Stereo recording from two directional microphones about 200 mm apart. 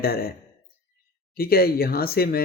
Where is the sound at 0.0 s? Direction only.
50° left (ahead or behind).